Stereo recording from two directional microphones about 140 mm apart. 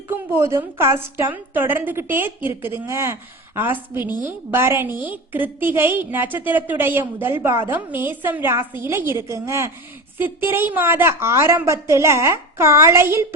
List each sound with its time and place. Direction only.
0.1 s a woman's voice: 20° right (ahead or behind)